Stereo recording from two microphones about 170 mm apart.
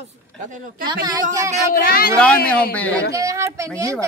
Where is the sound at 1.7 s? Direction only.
60° left (ahead or behind).